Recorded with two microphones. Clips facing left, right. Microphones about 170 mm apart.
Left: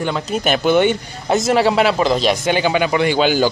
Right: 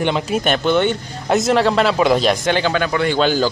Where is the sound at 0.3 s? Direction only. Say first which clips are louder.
Left 4 dB; 5° left (ahead or behind).